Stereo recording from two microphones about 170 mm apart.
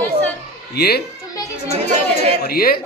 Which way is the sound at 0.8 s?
70° left (ahead or behind).